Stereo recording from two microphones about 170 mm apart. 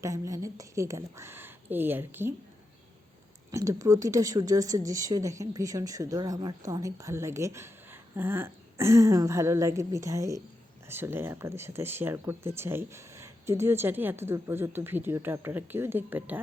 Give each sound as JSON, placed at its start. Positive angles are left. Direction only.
{"t": 0.0, "sound": "speech", "side_deg": -20}
{"t": 3.5, "sound": "a woman's voice", "side_deg": -20}